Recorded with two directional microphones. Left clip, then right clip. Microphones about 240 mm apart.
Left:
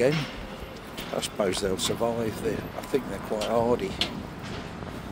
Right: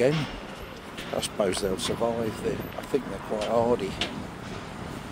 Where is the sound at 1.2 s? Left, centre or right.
Centre.